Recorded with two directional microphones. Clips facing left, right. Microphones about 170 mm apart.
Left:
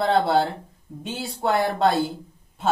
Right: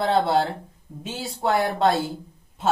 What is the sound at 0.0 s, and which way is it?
Speech, centre (ahead or behind).